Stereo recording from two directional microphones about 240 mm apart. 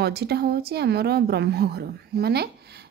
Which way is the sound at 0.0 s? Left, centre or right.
Right.